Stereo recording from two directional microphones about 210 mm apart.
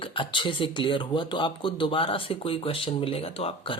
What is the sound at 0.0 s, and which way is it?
Speech, 25° left (ahead or behind).